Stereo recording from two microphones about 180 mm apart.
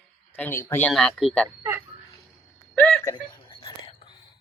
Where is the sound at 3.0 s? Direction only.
25° left (ahead or behind).